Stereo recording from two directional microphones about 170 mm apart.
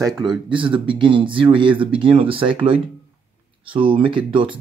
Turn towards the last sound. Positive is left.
turn(degrees=-30)  # may be behind; listen again after turning